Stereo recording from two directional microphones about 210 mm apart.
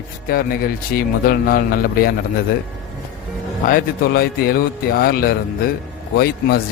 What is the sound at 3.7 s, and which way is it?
A man's voice, 45° left (ahead or behind).